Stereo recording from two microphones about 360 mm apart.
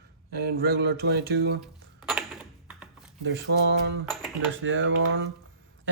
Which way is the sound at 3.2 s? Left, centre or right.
Right.